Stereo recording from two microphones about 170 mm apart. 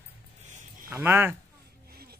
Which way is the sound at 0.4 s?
45° right (ahead or behind).